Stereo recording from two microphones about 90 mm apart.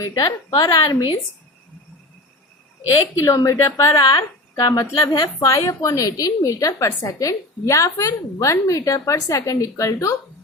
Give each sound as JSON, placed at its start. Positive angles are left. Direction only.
{"t": 0.1, "sound": "a woman's voice", "side_deg": 45}
{"t": 3.2, "sound": "a woman's voice", "side_deg": 35}